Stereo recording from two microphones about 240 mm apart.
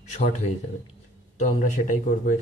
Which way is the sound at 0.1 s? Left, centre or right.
Left.